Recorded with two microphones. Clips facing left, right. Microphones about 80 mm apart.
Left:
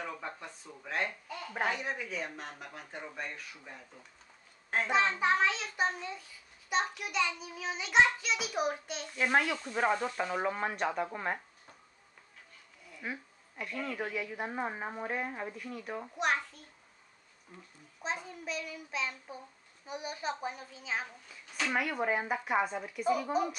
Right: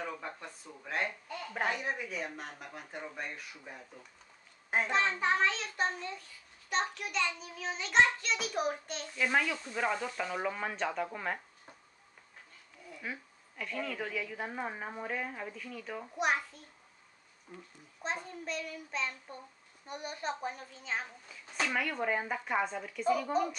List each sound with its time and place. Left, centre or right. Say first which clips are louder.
0.0 s speech: even; centre
4.8 s child singing: left 3 dB; centre
9.2 s speech: left 2 dB; left
9.8 s child singing: left 4 dB; left
13.0 s speech: left 2 dB; centre
13.9 s child singing: left 1 dB; centre
16.2 s a child's voice: even; centre
17.5 s a child's voice: right 3 dB; centre
21.6 s child singing: left 2 dB; centre